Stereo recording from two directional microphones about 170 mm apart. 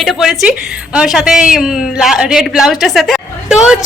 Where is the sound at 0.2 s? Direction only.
5° right (ahead or behind).